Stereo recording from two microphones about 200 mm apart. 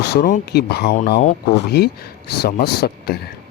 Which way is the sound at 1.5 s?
55° left (ahead or behind).